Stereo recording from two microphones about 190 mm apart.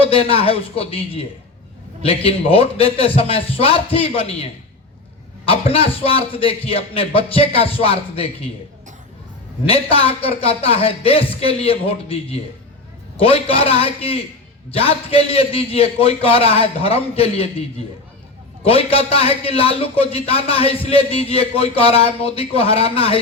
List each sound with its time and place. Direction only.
0.0 s a man's voice: 30° left (ahead or behind)
5.5 s a man's voice: 30° left (ahead or behind)
9.6 s a man's voice: 30° left (ahead or behind)
18.6 s a man's voice: 30° left (ahead or behind)